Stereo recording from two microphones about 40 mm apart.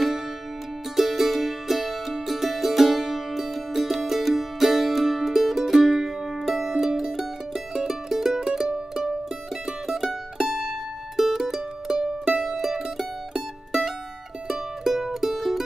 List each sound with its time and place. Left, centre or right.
0.9 s music: centre
10.0 s mandolin: centre
14.5 s music: centre